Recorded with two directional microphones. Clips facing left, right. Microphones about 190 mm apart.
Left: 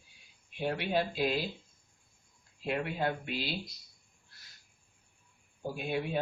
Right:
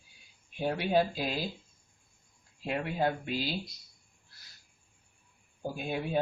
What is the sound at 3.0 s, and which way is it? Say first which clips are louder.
Speech: right 3 dB; 40° right (ahead or behind).